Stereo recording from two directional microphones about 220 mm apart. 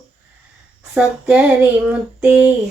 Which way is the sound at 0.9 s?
5° right (ahead or behind).